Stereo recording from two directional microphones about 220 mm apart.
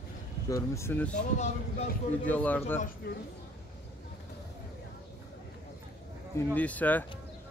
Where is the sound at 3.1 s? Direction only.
45° left (ahead or behind).